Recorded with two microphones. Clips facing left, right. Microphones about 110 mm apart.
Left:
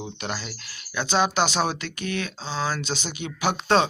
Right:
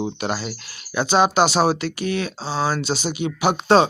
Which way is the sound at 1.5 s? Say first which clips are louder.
Right 7 dB; 35° right (ahead or behind).